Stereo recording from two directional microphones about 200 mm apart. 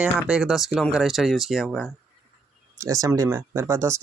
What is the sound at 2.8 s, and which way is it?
Speech, 15° right (ahead or behind).